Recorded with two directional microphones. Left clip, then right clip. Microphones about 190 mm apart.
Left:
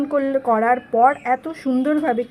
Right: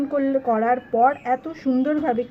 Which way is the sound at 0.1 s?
15° left (ahead or behind).